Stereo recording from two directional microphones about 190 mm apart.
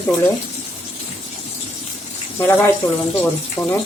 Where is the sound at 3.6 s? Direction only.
15° left (ahead or behind).